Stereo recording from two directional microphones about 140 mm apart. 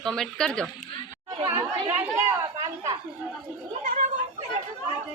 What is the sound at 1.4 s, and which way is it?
Speech, 15° right (ahead or behind).